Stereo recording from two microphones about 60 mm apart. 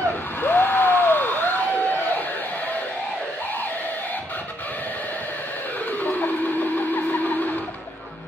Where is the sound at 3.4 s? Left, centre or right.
Left.